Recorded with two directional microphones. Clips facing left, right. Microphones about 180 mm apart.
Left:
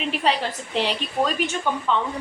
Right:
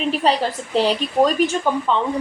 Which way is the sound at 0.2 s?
40° right (ahead or behind).